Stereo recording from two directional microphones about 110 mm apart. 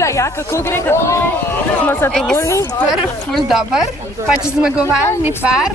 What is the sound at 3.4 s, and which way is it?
Speech, 5° right (ahead or behind).